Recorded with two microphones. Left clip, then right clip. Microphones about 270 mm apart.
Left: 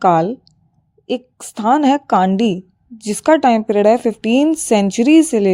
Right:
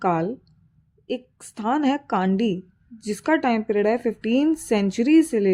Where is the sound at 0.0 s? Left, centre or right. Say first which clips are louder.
Left 10 dB; left.